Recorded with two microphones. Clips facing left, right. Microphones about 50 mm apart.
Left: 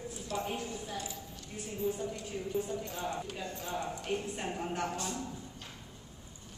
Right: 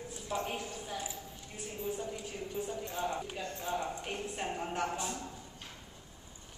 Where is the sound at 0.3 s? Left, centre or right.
Centre.